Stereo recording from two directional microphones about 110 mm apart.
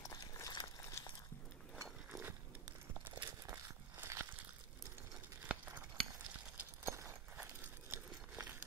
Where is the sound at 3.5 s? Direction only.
20° right (ahead or behind).